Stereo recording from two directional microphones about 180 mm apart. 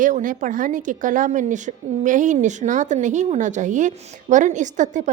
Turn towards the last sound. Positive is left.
turn(degrees=-45)  # may be behind; listen again after turning